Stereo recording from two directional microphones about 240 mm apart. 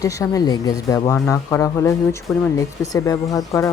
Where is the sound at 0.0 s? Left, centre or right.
Centre.